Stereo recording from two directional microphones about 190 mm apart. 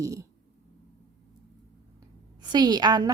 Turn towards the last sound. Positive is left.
turn(degrees=-20)  # may be behind; listen again after turning